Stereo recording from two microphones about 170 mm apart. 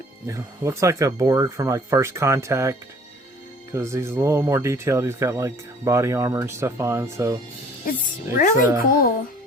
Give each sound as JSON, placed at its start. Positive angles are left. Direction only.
{"t": 0.3, "sound": "speech", "side_deg": -15}
{"t": 7.9, "sound": "a child's voice", "side_deg": 50}